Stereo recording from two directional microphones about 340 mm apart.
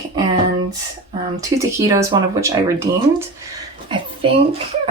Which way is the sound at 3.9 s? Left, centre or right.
Centre.